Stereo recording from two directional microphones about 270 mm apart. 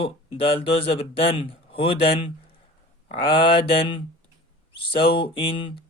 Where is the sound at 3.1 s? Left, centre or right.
Centre.